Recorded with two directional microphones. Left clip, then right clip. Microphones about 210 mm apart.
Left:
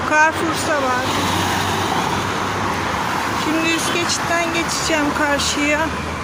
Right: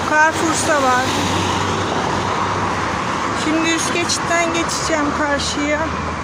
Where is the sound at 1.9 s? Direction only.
50° left (ahead or behind).